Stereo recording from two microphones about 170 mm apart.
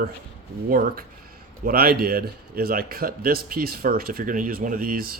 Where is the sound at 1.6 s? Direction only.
60° right (ahead or behind).